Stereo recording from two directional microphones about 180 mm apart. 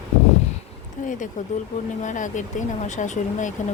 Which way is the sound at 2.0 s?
45° left (ahead or behind).